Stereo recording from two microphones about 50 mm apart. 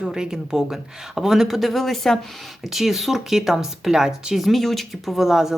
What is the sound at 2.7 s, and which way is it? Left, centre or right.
Speech, centre.